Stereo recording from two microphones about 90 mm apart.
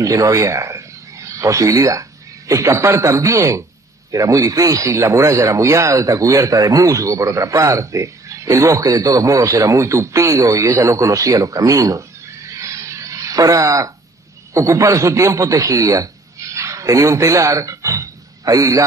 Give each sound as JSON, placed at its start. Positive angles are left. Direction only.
{"t": 0.0, "sound": "speech", "side_deg": -40}
{"t": 12.5, "sound": "a sound", "side_deg": -35}
{"t": 14.5, "sound": "speech", "side_deg": -35}